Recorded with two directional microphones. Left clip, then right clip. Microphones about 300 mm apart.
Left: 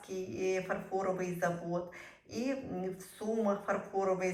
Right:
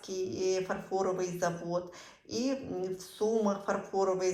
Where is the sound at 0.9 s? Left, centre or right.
Centre.